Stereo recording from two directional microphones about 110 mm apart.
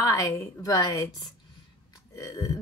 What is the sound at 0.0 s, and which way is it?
Speech, 30° left (ahead or behind).